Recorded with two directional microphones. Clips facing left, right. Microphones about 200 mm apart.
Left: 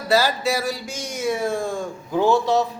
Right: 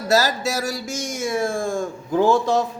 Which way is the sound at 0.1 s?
45° right (ahead or behind).